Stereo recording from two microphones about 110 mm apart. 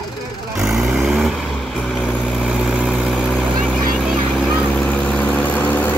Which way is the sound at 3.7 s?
10° left (ahead or behind).